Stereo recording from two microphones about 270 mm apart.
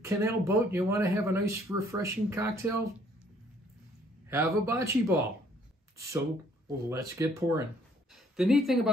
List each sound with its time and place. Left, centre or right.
0.0 s speech: centre
4.3 s speech: centre
6.9 s speech: centre